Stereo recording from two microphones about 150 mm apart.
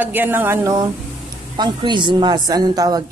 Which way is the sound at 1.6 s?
30° right (ahead or behind).